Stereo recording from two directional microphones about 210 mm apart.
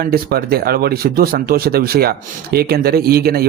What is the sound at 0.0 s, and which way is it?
Speech, 45° right (ahead or behind).